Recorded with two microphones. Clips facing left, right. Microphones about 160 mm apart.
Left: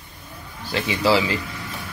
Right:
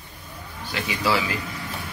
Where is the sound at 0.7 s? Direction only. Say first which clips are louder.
Left 5 dB; 25° left (ahead or behind).